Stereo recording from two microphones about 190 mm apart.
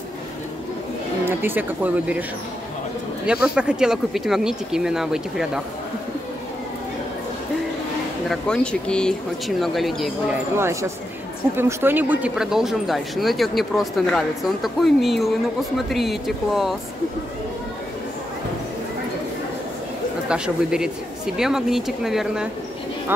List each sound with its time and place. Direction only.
1.2 s speech: 10° right (ahead or behind)
3.3 s speech: 5° right (ahead or behind)
8.3 s speech: 5° left (ahead or behind)
10.6 s speech: 15° right (ahead or behind)
20.2 s speech: 5° right (ahead or behind)